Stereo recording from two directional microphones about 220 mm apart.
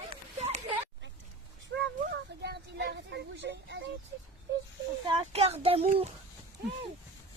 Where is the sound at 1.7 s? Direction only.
60° right (ahead or behind).